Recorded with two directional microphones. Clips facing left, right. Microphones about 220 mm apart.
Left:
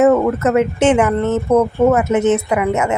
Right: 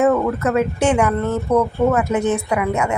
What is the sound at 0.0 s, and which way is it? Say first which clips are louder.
Speech: left 4 dB; 20° left (ahead or behind).